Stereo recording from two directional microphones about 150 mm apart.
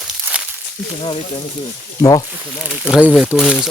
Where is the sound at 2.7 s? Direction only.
5° right (ahead or behind).